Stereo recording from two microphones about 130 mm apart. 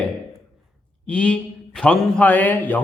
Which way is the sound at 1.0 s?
10° left (ahead or behind).